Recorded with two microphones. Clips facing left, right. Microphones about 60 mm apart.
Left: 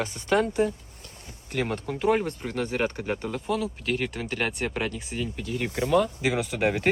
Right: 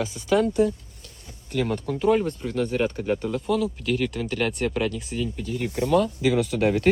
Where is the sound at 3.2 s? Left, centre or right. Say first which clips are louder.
Right 3 dB; centre.